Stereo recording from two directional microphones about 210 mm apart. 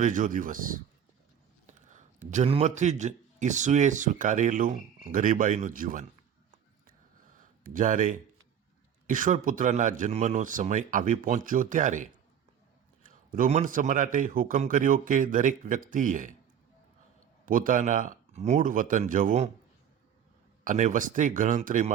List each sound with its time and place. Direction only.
0.0 s speech: 40° right (ahead or behind)
7.3 s speech: 40° right (ahead or behind)
13.3 s speech: 35° right (ahead or behind)
17.4 s speech: 40° right (ahead or behind)
20.7 s speech: 35° right (ahead or behind)